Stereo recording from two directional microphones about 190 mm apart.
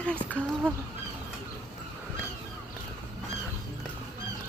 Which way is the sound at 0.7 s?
5° left (ahead or behind).